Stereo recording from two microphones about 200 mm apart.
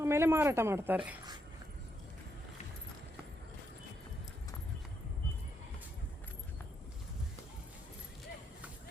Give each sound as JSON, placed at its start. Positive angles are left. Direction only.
{"t": 0.0, "sound": "speech", "side_deg": -10}